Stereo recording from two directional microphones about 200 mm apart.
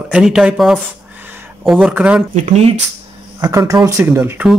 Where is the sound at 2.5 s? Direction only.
35° right (ahead or behind).